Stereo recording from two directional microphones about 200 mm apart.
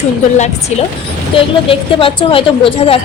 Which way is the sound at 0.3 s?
35° left (ahead or behind).